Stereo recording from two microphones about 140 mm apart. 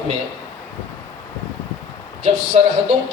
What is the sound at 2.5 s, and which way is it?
Speech, 50° right (ahead or behind).